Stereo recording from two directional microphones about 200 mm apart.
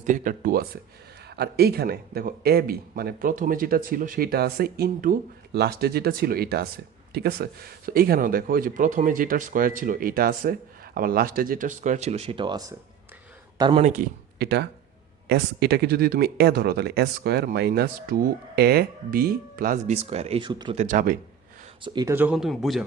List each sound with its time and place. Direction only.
0.0 s speech: 40° right (ahead or behind); by 13.8 s 25° right (ahead or behind)
13.8 s speech: 40° right (ahead or behind); by 20.7 s 25° right (ahead or behind)
20.7 s speech: 40° right (ahead or behind)
21.8 s speech: 20° right (ahead or behind)
22.1 s speech: 5° right (ahead or behind)